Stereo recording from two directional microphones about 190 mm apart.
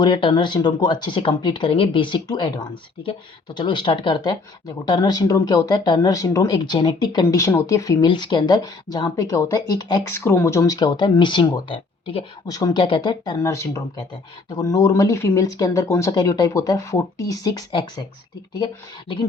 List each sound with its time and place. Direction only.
0.0 s speech: 25° left (ahead or behind)